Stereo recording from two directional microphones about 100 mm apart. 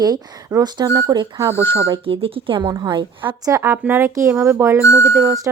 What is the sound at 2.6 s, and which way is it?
Speech, 45° right (ahead or behind).